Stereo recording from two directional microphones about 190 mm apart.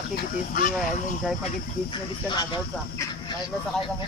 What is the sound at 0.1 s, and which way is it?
Speech, 45° left (ahead or behind).